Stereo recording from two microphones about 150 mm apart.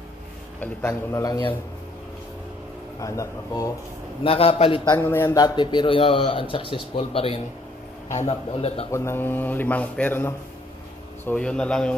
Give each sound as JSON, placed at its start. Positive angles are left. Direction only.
{"t": 0.6, "sound": "a man's voice", "side_deg": 20}
{"t": 3.0, "sound": "a man's voice", "side_deg": 20}
{"t": 4.2, "sound": "a man's voice", "side_deg": 35}
{"t": 4.9, "sound": "a man's voice", "side_deg": 15}
{"t": 8.9, "sound": "a man's voice", "side_deg": 15}